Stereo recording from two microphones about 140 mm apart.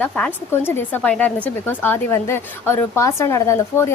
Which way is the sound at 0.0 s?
15° left (ahead or behind).